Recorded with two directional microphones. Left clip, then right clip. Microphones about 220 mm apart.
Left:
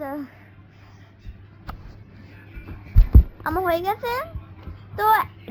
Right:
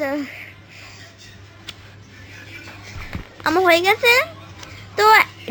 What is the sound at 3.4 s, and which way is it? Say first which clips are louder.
A woman's voice: right 8 dB; 25° right (ahead or behind).